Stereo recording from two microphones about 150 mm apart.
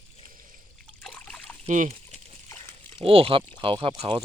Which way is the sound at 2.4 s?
20° left (ahead or behind).